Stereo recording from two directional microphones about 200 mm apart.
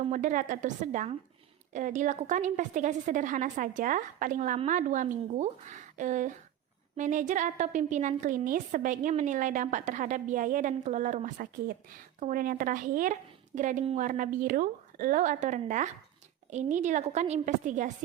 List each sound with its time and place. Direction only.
0.0 s a woman's voice: 40° right (ahead or behind)